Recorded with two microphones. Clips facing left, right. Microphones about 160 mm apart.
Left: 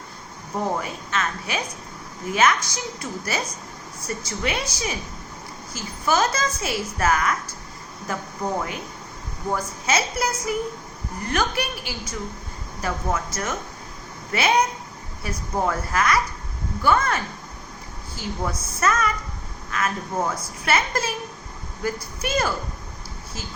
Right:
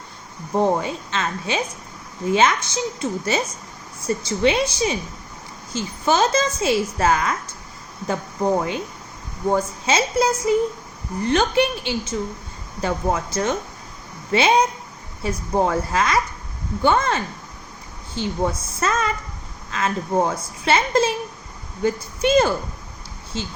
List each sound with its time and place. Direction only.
0.8 s a woman's voice: 25° right (ahead or behind)